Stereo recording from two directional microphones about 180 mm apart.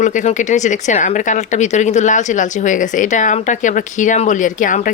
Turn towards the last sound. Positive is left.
turn(degrees=45)  # may be behind; listen again after turning